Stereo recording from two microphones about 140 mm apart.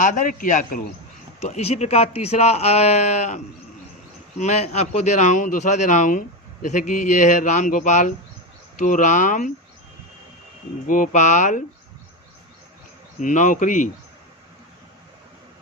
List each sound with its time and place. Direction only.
0.0 s a man's voice: 65° left (ahead or behind)
1.4 s a man's voice: 50° left (ahead or behind); by 9.5 s 65° left (ahead or behind)
10.8 s a man's voice: 70° left (ahead or behind)
13.1 s a man's voice: 65° left (ahead or behind)